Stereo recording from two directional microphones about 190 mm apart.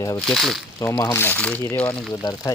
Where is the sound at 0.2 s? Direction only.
Centre (ahead or behind).